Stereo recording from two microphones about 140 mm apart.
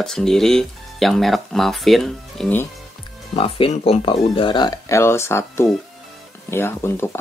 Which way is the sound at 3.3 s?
40° left (ahead or behind).